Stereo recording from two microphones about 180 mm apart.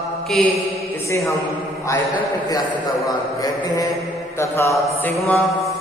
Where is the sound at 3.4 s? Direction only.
20° left (ahead or behind).